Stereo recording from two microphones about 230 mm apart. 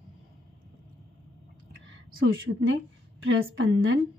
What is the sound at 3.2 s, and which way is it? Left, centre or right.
Speech, right.